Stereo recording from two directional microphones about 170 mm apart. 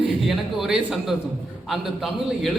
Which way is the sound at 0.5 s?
Centre (ahead or behind).